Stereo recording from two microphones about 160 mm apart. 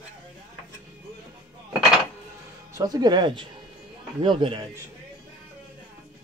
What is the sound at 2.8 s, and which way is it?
Speech, 25° right (ahead or behind).